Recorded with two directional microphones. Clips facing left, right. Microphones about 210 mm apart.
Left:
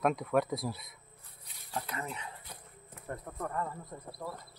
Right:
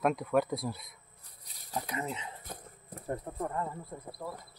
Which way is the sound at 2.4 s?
40° right (ahead or behind).